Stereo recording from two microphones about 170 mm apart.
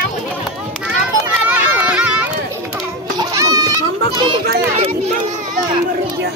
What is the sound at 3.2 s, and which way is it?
Children playing, 20° right (ahead or behind).